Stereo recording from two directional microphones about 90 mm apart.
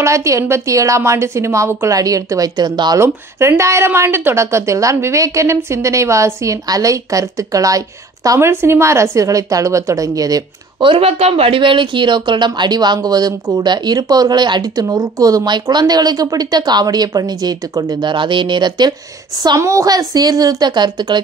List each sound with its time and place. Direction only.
0.0 s a woman's voice: 35° right (ahead or behind); by 3.0 s 55° right (ahead or behind)
3.0 s a woman's voice: 30° right (ahead or behind)
8.5 s a woman's voice: 30° right (ahead or behind)
10.8 s speech: 80° right; by 18.1 s 45° right (ahead or behind)
18.1 s speech: 65° right (ahead or behind)
19.6 s speech: 35° right (ahead or behind); by 21.2 s 55° right (ahead or behind)